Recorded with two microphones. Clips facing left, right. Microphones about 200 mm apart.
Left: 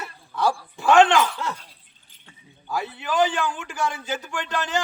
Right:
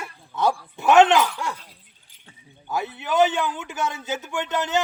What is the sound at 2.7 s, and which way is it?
A man's voice, 20° right (ahead or behind).